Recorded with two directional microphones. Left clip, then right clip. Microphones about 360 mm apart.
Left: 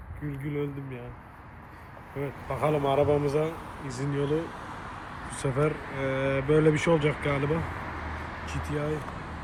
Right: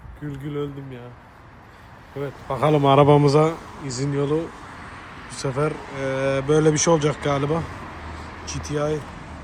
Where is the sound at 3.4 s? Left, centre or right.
Right.